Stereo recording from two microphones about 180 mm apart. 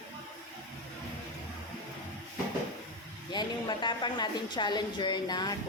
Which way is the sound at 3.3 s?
25° left (ahead or behind).